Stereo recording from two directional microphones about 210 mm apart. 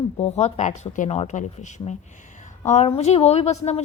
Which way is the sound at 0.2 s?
30° left (ahead or behind).